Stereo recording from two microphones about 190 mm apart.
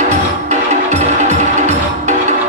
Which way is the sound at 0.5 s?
40° right (ahead or behind).